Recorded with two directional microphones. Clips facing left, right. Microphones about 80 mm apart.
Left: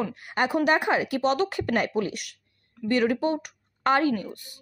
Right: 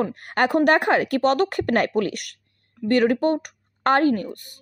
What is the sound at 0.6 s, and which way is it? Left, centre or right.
A woman's voice, right.